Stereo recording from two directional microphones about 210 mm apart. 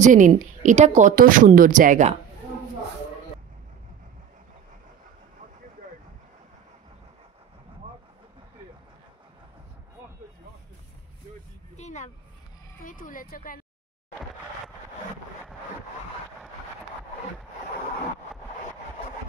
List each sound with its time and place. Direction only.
0.0 s a woman's voice: 35° right (ahead or behind)
11.7 s vehicle: 35° left (ahead or behind)
12.8 s a sound: 40° left (ahead or behind)